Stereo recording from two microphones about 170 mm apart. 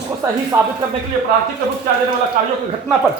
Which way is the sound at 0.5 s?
20° right (ahead or behind).